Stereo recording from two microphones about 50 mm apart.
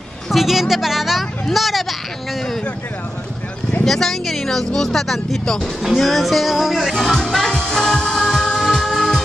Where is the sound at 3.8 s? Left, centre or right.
Centre.